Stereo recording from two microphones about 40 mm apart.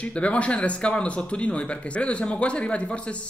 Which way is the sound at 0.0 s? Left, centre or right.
Left.